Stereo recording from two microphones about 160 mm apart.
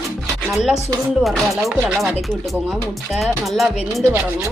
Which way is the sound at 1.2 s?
Centre (ahead or behind).